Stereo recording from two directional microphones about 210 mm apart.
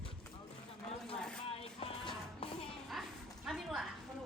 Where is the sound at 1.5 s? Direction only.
30° left (ahead or behind).